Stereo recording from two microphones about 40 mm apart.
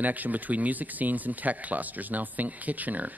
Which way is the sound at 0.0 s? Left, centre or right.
Right.